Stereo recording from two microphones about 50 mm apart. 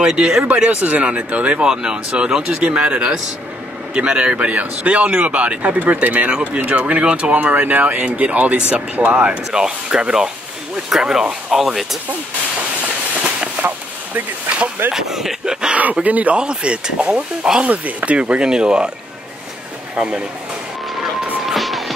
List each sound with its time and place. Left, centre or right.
0.0 s speech: centre
0.7 s speech: right
9.5 s speech: centre
13.6 s chop: right
14.9 s speech: centre
15.7 s speech: right
16.3 s speech: right
17.6 s speech: right
20.0 s speech: centre
21.5 s music: centre